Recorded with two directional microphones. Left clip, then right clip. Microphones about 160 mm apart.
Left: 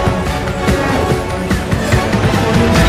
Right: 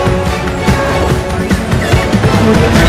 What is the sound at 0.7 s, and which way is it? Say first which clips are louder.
Music: right 2 dB; centre (ahead or behind).